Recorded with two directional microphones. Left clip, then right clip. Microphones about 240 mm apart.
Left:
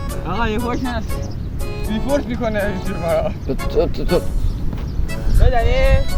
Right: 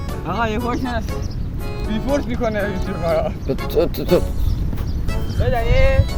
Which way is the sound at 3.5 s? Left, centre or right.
Right.